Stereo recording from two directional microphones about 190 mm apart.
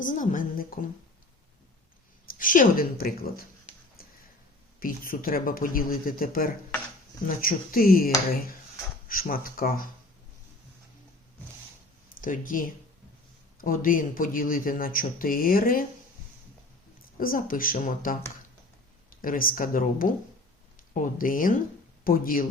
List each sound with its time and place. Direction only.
0.0 s speech: 45° left (ahead or behind)
2.4 s speech: 45° left (ahead or behind)
4.8 s speech: 45° left (ahead or behind)
12.0 s speech: 45° left (ahead or behind)
17.2 s speech: 45° left (ahead or behind)